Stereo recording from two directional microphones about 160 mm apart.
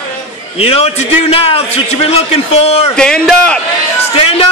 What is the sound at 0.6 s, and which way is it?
A man's voice, 40° left (ahead or behind).